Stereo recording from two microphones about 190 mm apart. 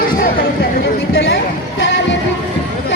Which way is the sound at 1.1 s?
65° left (ahead or behind).